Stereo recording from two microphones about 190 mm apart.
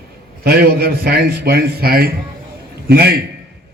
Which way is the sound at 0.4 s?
55° right (ahead or behind).